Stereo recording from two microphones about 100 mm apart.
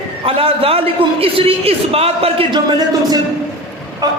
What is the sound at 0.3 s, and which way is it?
A man's voice, 70° right (ahead or behind).